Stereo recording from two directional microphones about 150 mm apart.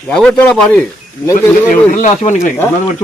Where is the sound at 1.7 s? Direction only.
60° left (ahead or behind).